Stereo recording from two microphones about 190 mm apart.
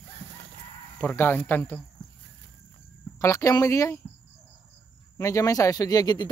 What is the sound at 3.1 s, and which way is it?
Speech, 15° left (ahead or behind).